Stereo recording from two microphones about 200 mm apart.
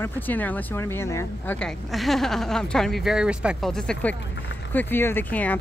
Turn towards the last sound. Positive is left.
turn(degrees=10)  # may be behind; listen again after turning